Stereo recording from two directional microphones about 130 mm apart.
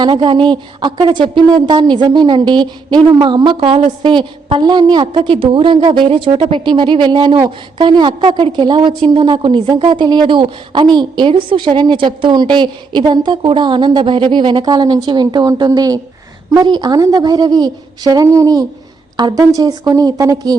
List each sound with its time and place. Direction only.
0.0 s a woman's voice: 40° right (ahead or behind)